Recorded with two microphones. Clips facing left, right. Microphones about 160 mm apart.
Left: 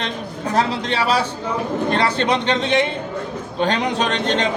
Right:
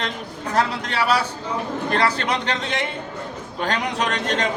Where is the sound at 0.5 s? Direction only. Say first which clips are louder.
Left 2 dB; 25° left (ahead or behind).